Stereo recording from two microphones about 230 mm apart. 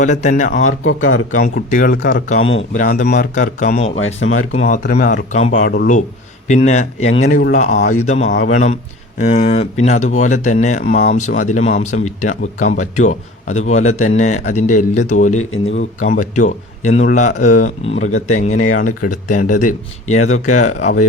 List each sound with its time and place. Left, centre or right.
0.0 s speech: left
0.5 s speech: left
1.3 s speech: left
3.9 s speech: left
4.6 s speech: left
17.9 s speech: left
18.3 s speech: left
18.5 s speech: left
18.8 s speech: left